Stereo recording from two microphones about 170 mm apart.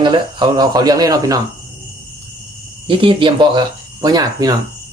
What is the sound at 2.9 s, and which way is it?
Speech, 30° right (ahead or behind).